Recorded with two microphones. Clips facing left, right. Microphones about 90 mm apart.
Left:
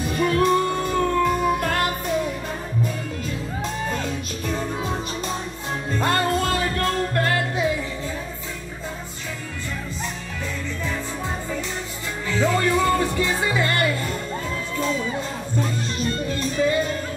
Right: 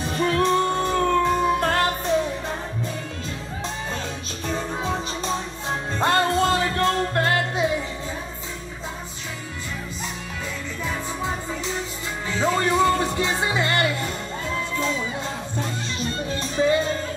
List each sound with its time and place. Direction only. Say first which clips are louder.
0.2 s music: left 1 dB; 25° right (ahead or behind)
4.5 s music: right 1 dB; 30° right (ahead or behind)
12.3 s music: left 1 dB; 20° right (ahead or behind)
16.3 s music: right 2 dB; 30° right (ahead or behind)